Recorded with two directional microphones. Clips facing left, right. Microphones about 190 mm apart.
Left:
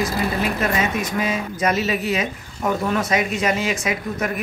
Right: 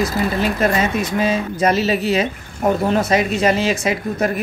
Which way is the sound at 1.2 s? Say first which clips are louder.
Right 6 dB; 30° right (ahead or behind).